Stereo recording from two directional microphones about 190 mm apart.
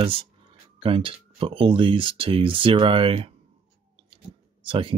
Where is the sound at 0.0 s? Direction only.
30° right (ahead or behind).